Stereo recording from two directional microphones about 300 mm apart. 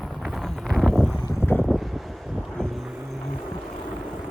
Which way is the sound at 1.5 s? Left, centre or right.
Centre.